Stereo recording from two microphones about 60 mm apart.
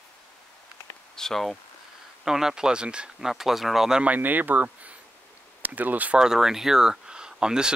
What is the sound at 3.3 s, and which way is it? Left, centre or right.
Speech, centre.